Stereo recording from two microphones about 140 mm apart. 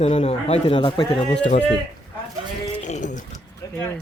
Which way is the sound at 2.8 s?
60° left (ahead or behind).